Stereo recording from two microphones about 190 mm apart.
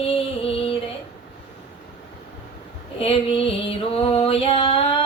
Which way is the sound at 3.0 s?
30° left (ahead or behind).